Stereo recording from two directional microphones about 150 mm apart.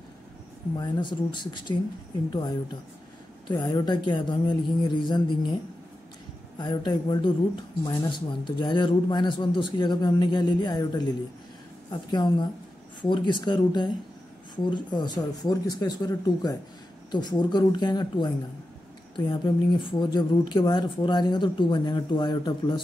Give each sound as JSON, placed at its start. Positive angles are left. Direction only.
{"t": 0.7, "sound": "a man's voice", "side_deg": 30}
{"t": 3.4, "sound": "a man's voice", "side_deg": 25}
{"t": 6.6, "sound": "a man's voice", "side_deg": 30}
{"t": 12.1, "sound": "a man's voice", "side_deg": 30}